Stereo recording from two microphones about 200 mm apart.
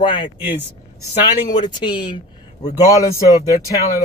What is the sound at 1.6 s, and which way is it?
Speech, 25° left (ahead or behind).